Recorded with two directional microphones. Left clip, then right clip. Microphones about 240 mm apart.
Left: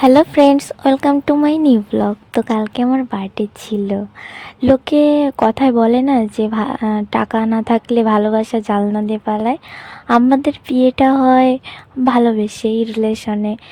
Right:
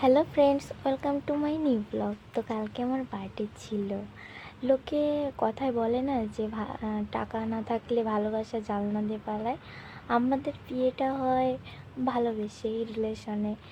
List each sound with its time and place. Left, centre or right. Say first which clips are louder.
0.0 s speech: left 13 dB; left